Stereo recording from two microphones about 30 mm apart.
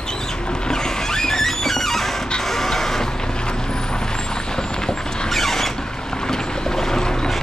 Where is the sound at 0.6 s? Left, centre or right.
Left.